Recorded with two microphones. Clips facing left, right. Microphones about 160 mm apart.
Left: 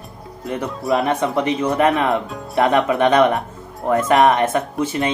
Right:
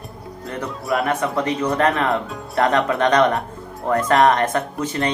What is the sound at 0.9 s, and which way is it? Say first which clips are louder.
Speech: left 3 dB; 25° left (ahead or behind).